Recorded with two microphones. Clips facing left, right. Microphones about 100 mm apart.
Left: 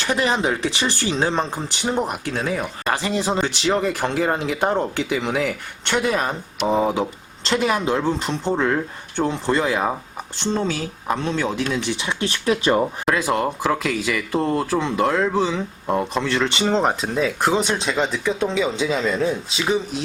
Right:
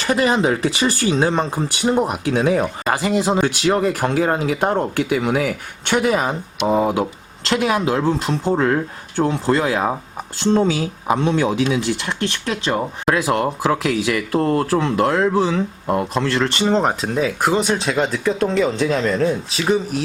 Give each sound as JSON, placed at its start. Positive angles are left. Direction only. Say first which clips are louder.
{"t": 0.0, "sound": "speech", "louder": "right 4 dB", "side_deg": 0}